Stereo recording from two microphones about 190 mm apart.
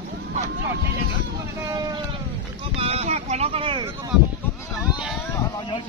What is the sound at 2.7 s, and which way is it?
Speech, 30° right (ahead or behind).